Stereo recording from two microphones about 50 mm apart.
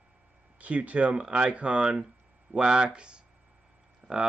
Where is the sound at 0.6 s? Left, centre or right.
Right.